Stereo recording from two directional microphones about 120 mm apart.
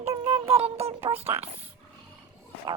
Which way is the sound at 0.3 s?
50° right (ahead or behind).